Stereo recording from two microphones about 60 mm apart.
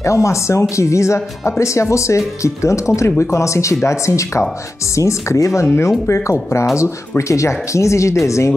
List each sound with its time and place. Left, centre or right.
0.0 s speech: left